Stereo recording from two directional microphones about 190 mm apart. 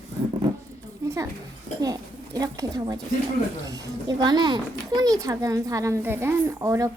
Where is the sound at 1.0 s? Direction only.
15° right (ahead or behind).